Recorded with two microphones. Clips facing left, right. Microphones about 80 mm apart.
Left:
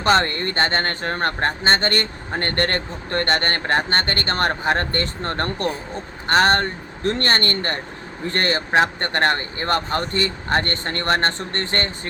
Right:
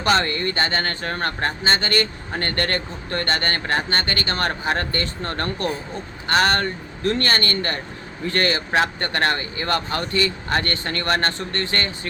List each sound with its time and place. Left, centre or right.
0.0 s speech: left